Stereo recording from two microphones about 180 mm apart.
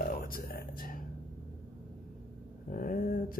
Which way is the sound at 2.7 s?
50° left (ahead or behind).